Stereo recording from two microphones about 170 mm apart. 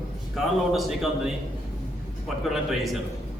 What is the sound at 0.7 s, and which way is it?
Speech, centre (ahead or behind).